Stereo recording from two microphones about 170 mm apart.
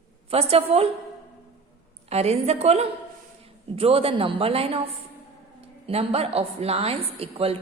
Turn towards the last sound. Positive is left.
turn(degrees=-35)  # may be behind; listen again after turning